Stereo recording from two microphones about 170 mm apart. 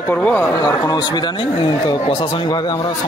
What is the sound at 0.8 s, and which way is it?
Speech, 25° left (ahead or behind).